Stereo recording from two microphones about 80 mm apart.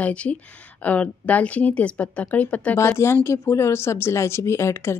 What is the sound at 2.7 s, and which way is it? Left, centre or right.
Speech, left.